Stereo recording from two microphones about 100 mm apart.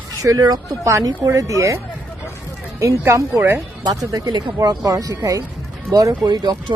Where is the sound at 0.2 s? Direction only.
35° right (ahead or behind).